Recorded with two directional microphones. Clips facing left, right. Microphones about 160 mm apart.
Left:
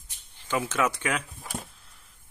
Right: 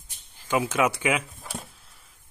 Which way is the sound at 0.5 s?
10° right (ahead or behind).